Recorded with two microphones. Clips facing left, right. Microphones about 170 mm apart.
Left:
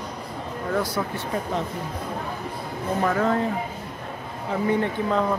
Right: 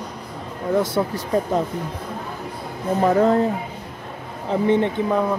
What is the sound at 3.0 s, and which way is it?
Speech, 30° right (ahead or behind).